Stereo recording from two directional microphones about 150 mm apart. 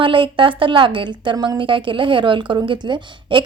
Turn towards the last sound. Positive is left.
turn(degrees=-30)  # may be behind; listen again after turning